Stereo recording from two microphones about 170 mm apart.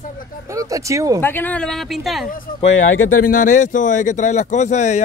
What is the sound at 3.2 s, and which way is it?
Speech, 50° left (ahead or behind).